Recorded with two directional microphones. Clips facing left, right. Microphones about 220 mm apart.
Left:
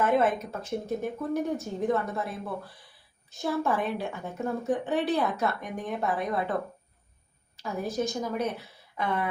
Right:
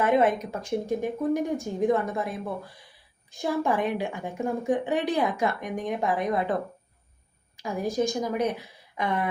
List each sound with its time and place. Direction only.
0.0 s a woman's voice: 15° right (ahead or behind)
3.3 s a woman's voice: 15° right (ahead or behind)
7.5 s a woman's voice: 15° right (ahead or behind)